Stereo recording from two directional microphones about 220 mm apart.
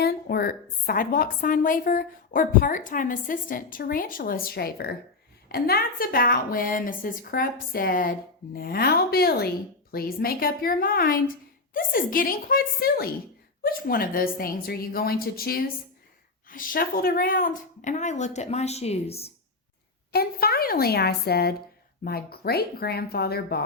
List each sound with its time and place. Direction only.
0.0 s speech: 45° left (ahead or behind); by 19.3 s 25° left (ahead or behind)
20.1 s speech: 45° left (ahead or behind)